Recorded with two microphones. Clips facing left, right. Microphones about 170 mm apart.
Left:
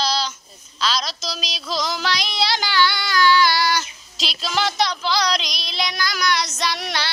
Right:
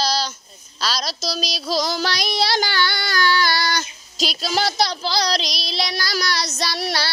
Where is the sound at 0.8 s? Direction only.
40° right (ahead or behind).